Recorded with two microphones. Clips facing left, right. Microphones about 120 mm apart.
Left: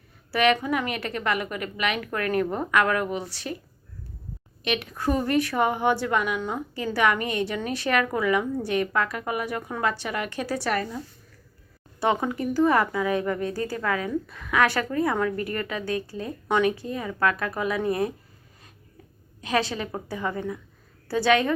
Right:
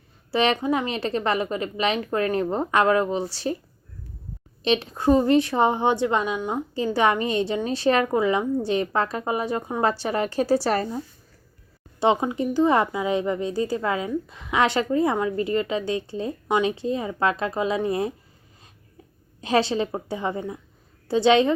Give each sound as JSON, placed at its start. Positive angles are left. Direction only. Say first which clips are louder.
{"t": 0.3, "sound": "a woman's voice", "louder": "right 1 dB", "side_deg": -30}
{"t": 4.6, "sound": "a woman's voice", "louder": "right 5 dB", "side_deg": -30}
{"t": 11.9, "sound": "a woman's voice", "louder": "right 3 dB", "side_deg": -20}
{"t": 19.4, "sound": "a woman's voice", "louder": "right 5 dB", "side_deg": -30}